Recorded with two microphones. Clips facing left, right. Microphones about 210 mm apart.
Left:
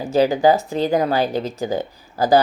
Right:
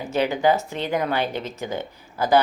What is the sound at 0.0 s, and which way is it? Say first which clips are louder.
A woman's voice: left 5 dB; 35° left (ahead or behind).